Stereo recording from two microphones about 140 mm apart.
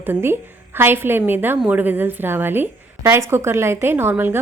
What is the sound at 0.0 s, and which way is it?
A woman's voice, 15° right (ahead or behind).